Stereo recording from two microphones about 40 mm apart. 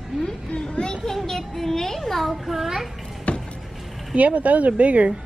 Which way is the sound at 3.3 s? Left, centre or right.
Left.